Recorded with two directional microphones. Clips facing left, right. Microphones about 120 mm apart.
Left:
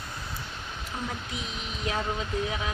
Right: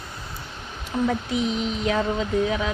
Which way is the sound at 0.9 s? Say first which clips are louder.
Right 12 dB; 80° right.